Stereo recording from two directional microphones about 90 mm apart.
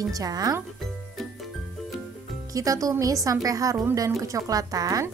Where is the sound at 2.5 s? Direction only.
40° right (ahead or behind).